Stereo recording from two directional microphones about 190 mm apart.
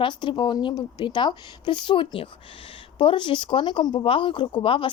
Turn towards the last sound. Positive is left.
turn(degrees=25)  # may be behind; listen again after turning